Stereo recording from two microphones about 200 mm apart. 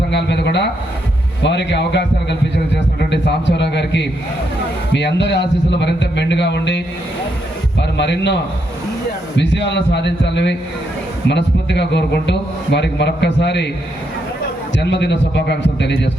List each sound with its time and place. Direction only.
0.1 s a man's voice: 60° left (ahead or behind)
3.1 s a sound: 60° left (ahead or behind)
4.9 s a man's voice: 60° left (ahead or behind)
14.8 s a man's voice: 60° left (ahead or behind)